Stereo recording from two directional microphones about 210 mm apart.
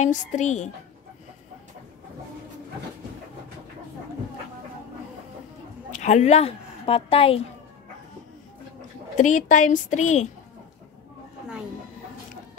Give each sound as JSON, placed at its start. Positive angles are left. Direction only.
{"t": 0.0, "sound": "a woman's voice", "side_deg": 35}
{"t": 5.9, "sound": "a woman's voice", "side_deg": 35}
{"t": 9.1, "sound": "a woman's voice", "side_deg": 35}